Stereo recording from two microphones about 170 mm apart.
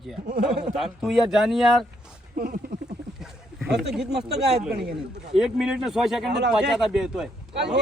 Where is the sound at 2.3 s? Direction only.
60° right (ahead or behind).